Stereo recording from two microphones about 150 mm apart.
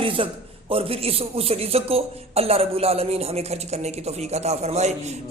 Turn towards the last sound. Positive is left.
turn(degrees=-45)  # may be behind; listen again after turning